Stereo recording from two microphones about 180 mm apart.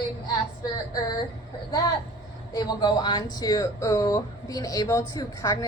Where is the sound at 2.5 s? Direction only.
20° left (ahead or behind).